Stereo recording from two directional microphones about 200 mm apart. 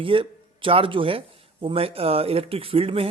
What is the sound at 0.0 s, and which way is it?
Speech, 25° right (ahead or behind).